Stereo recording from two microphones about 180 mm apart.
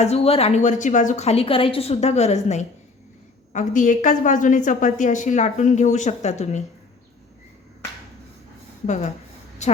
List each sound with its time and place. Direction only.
0.0 s a woman's voice: 35° left (ahead or behind)
8.9 s a woman's voice: 40° left (ahead or behind)